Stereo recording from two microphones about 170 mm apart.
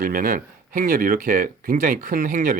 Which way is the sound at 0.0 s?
55° right (ahead or behind).